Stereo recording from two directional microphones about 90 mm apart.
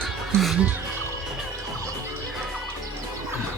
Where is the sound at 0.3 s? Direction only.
Centre (ahead or behind).